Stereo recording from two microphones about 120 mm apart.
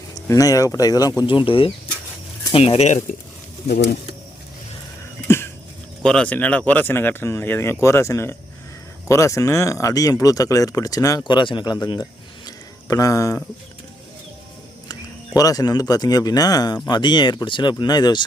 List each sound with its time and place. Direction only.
0.1 s speech: 30° left (ahead or behind); by 3.0 s 65° left (ahead or behind)
6.0 s speech: 5° left (ahead or behind); by 11.2 s 30° left (ahead or behind)
11.2 s speech: 40° left (ahead or behind)
12.5 s a sound: 30° left (ahead or behind)
14.8 s speech: 30° left (ahead or behind)